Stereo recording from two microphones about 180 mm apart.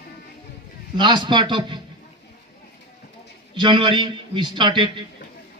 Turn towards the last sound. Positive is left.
turn(degrees=-25)  # may be behind; listen again after turning